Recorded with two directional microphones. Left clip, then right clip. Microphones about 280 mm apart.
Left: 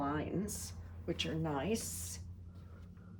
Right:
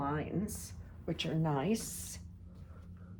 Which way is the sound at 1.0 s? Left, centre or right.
Centre.